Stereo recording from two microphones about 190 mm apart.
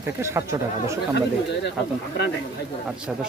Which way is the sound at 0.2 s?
15° right (ahead or behind).